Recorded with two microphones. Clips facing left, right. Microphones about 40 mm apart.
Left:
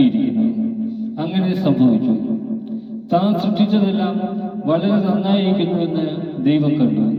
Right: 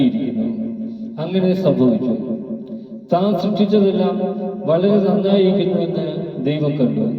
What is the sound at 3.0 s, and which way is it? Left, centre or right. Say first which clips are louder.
Music: even; left.